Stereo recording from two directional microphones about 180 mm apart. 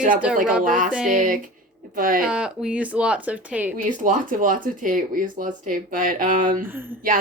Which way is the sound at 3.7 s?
45° right (ahead or behind).